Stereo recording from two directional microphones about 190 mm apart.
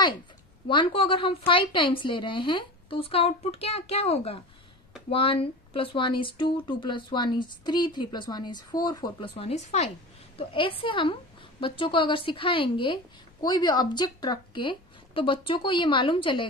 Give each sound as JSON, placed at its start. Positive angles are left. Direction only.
{"t": 0.7, "sound": "a woman's voice", "side_deg": 25}